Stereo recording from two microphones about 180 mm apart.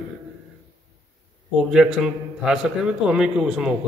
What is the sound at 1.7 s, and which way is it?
A man's voice, 5° right (ahead or behind).